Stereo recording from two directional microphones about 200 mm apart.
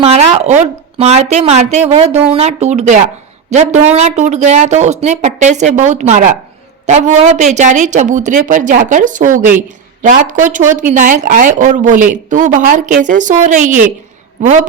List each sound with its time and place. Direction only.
0.0 s a woman's voice: 30° right (ahead or behind)